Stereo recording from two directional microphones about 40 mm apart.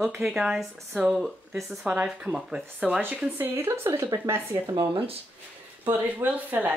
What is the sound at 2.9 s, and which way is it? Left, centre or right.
Speech, right.